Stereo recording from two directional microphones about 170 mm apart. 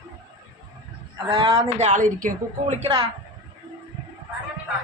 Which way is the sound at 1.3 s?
30° right (ahead or behind).